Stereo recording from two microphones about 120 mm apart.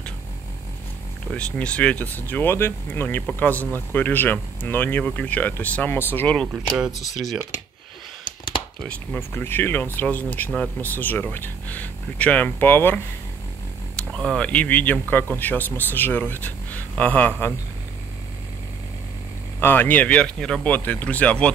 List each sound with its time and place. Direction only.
1.3 s speech: 10° left (ahead or behind)
6.8 s speech: centre (ahead or behind)
8.8 s speech: 15° left (ahead or behind)
13.9 s speech: 5° left (ahead or behind)
19.6 s speech: 15° left (ahead or behind)